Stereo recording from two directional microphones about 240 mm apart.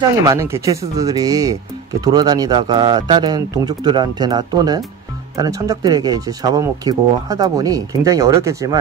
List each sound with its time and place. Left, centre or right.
0.3 s speech: centre